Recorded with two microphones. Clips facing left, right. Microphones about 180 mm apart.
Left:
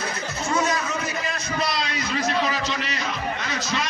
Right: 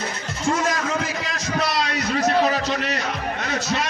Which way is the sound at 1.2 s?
70° right (ahead or behind).